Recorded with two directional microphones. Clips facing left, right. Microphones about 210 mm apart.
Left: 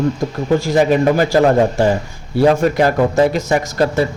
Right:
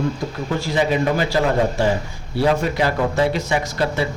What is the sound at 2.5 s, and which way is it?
Speech, 45° left (ahead or behind).